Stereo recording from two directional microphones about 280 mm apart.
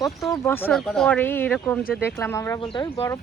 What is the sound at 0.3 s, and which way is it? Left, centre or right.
Speech, centre.